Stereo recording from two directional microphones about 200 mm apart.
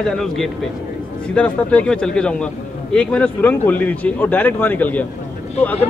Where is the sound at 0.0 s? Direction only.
Centre (ahead or behind).